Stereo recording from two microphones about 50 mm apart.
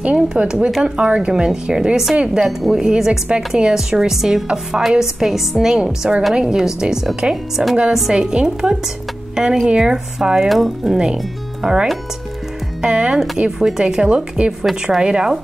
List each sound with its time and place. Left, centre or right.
0.0 s a woman's voice: right
2.4 s speech: centre
2.8 s a woman's voice: centre
3.9 s a woman's voice: centre
10.5 s speech: centre
10.9 s a woman's voice: centre